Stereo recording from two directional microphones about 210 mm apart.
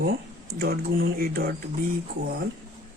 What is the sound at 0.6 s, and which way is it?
Speech, 45° right (ahead or behind).